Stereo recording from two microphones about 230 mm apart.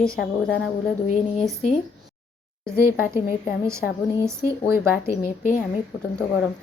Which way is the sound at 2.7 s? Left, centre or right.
Centre.